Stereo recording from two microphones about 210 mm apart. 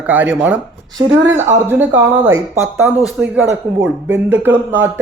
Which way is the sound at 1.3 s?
35° right (ahead or behind).